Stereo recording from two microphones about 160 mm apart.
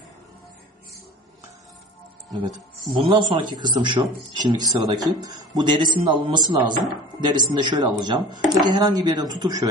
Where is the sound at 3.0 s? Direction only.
30° right (ahead or behind).